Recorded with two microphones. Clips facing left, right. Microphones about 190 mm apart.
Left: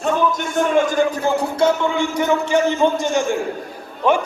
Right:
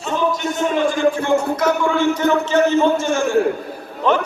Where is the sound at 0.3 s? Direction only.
50° left (ahead or behind); by 1.7 s 30° left (ahead or behind).